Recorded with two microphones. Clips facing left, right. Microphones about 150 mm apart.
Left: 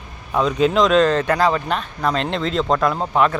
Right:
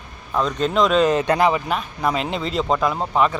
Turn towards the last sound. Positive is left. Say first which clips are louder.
# left 1 dB
turn(degrees=0)  # may be behind; listen again after turning